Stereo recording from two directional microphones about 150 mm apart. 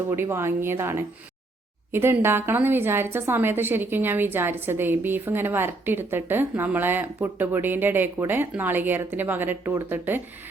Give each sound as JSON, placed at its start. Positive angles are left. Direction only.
{"t": 0.1, "sound": "a woman's voice", "side_deg": -15}